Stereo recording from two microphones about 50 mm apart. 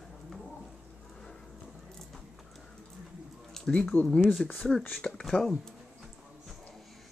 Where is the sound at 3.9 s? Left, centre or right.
Left.